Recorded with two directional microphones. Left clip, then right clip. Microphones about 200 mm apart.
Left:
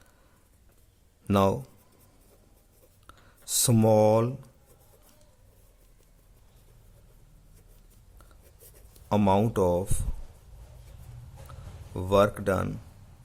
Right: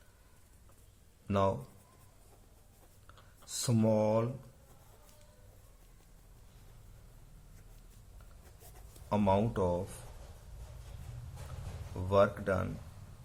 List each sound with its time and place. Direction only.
1.3 s a man's voice: 55° left (ahead or behind)
3.1 s speech: 55° left (ahead or behind)
9.0 s speech: 55° left (ahead or behind)
11.9 s speech: 55° left (ahead or behind)